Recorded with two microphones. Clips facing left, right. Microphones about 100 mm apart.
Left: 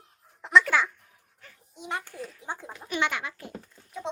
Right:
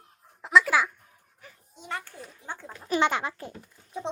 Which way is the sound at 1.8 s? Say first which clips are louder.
Left 2 dB; 15° left (ahead or behind).